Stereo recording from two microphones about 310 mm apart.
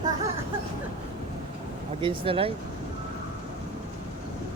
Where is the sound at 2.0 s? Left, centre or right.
Centre.